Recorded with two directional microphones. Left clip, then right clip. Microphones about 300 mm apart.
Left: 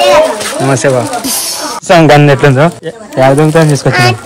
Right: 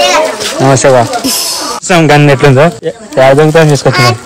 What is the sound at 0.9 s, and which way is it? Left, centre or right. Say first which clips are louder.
Speech: right 5 dB; centre.